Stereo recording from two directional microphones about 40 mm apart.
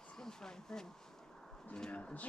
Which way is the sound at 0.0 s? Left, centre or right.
Centre.